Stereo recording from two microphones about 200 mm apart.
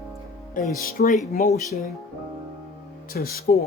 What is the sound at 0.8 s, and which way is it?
Speech, 45° left (ahead or behind).